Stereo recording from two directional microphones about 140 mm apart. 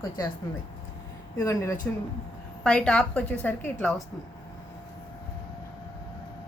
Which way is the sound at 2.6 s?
5° left (ahead or behind).